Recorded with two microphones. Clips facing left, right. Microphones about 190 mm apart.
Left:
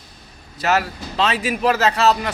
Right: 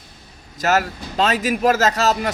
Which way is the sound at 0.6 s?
45° right (ahead or behind).